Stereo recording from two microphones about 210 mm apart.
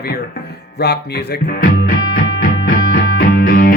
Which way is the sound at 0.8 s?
50° left (ahead or behind).